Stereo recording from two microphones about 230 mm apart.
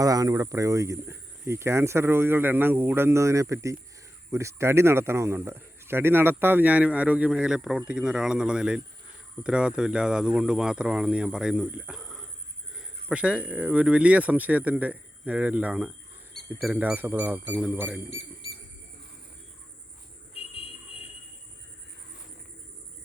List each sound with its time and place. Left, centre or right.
0.0 s speech: centre
18.1 s bird: left
20.3 s a sound: left